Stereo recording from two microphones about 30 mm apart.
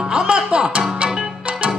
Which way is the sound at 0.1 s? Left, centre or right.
Right.